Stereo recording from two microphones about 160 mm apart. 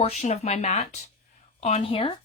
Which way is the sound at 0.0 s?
45° left (ahead or behind).